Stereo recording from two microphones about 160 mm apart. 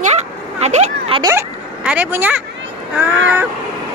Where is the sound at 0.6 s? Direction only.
45° right (ahead or behind).